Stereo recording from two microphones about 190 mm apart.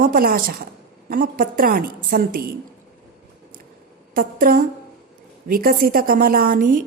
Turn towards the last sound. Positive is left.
turn(degrees=-50)  # may be behind; listen again after turning